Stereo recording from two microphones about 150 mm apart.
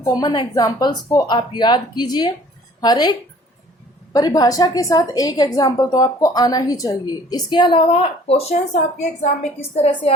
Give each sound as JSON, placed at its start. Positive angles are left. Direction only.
{"t": 0.0, "sound": "a woman's voice", "side_deg": 30}
{"t": 9.7, "sound": "a woman's voice", "side_deg": 40}